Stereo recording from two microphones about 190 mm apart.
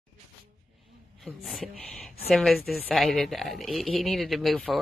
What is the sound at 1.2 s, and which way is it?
A woman's voice, centre (ahead or behind).